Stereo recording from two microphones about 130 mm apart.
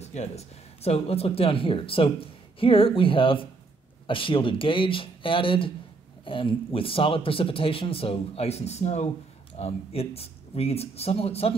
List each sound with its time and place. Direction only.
0.0 s speech: 55° left (ahead or behind)